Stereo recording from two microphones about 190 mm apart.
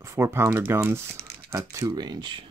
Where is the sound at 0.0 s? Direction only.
15° right (ahead or behind).